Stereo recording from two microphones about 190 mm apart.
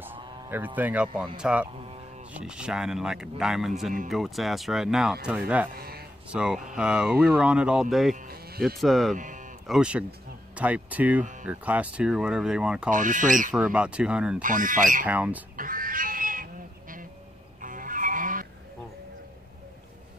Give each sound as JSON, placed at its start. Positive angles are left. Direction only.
{"t": 0.7, "sound": "speech", "side_deg": -10}
{"t": 5.8, "sound": "speech", "side_deg": -55}
{"t": 6.3, "sound": "speech", "side_deg": -5}
{"t": 8.3, "sound": "music", "side_deg": -55}
{"t": 8.7, "sound": "speech", "side_deg": 0}
{"t": 9.1, "sound": "speech", "side_deg": -45}
{"t": 9.7, "sound": "speech", "side_deg": -5}
{"t": 12.9, "sound": "speech", "side_deg": -45}
{"t": 13.5, "sound": "speech", "side_deg": -5}
{"t": 14.4, "sound": "speech", "side_deg": -45}
{"t": 15.0, "sound": "speech", "side_deg": -10}
{"t": 15.5, "sound": "cat", "side_deg": -45}
{"t": 17.6, "sound": "vehicle", "side_deg": -45}